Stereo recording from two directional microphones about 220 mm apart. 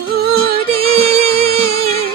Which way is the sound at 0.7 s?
25° right (ahead or behind).